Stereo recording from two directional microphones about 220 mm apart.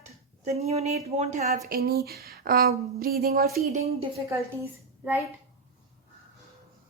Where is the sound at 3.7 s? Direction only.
30° right (ahead or behind).